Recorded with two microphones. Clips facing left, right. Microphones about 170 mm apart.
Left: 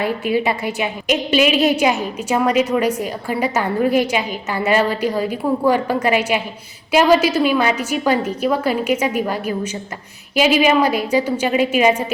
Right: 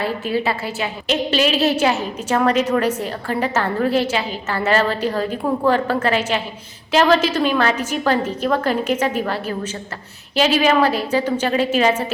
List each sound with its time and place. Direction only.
0.0 s a woman's voice: 15° left (ahead or behind)